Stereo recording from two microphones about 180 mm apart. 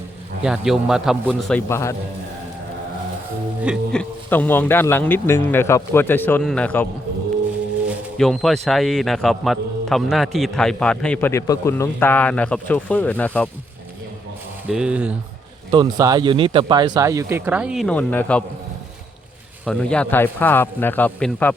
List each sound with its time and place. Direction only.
0.4 s speech: 5° right (ahead or behind)
1.5 s a man's voice: 15° left (ahead or behind)
3.9 s a man's voice: 10° left (ahead or behind)
7.9 s speech: centre (ahead or behind)
14.7 s speech: 5° right (ahead or behind)
15.7 s speech: 20° right (ahead or behind); by 18.4 s 10° left (ahead or behind)
19.6 s a man's voice: 5° left (ahead or behind)